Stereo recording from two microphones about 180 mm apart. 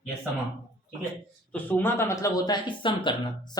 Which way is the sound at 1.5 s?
10° left (ahead or behind).